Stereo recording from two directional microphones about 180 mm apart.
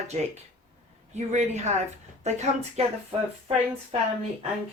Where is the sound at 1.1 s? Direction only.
40° right (ahead or behind).